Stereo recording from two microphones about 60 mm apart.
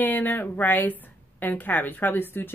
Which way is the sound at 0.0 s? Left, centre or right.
Left.